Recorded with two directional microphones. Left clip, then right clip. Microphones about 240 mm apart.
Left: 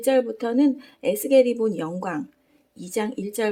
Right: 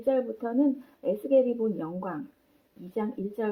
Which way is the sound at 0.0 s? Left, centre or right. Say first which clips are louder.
Left 6 dB; left.